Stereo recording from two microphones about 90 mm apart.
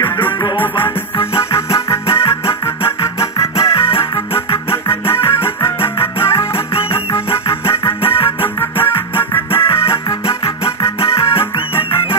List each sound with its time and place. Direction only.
0.6 s music: 25° left (ahead or behind)
3.2 s music: 90° left
4.6 s music: 30° left (ahead or behind)
6.5 s music: 90° left
7.4 s music: 30° left (ahead or behind)
10.2 s music: 90° left
11.1 s music: 30° left (ahead or behind)